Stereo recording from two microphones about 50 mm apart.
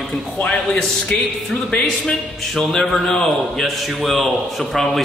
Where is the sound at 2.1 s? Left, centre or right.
Centre.